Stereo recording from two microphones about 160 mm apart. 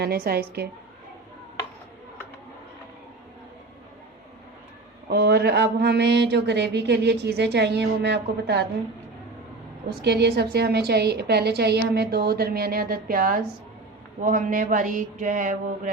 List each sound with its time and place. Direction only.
0.0 s a woman's voice: 75° right (ahead or behind)
5.1 s speech: 90° right
10.0 s speech: 90° right; by 13.4 s 65° right (ahead or behind)
14.2 s mantra: 55° right (ahead or behind)